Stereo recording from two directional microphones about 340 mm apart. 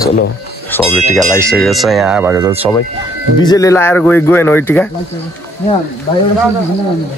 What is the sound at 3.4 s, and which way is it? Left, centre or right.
Speech, centre.